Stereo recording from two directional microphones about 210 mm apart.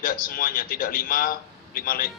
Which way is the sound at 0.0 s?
40° left (ahead or behind).